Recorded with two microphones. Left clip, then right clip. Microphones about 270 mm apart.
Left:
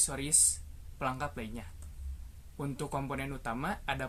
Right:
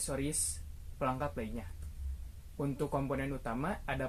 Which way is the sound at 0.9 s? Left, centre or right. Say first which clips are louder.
Even; left.